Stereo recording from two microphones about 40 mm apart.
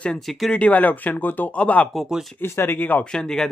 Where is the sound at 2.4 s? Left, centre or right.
Left.